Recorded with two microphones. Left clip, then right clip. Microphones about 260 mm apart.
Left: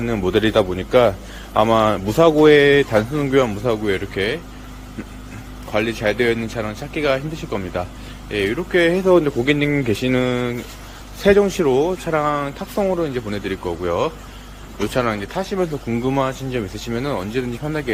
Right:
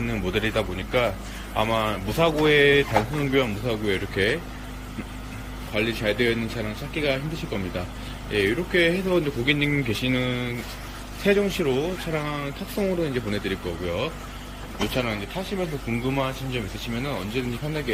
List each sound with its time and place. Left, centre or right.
0.0 s speech: left; by 4.4 s centre
5.7 s speech: centre